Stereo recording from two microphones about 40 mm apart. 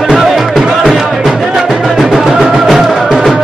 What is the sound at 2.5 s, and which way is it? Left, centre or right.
Music, centre.